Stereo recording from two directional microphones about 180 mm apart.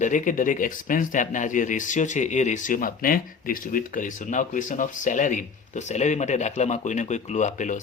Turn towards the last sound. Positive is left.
turn(degrees=45)  # may be behind; listen again after turning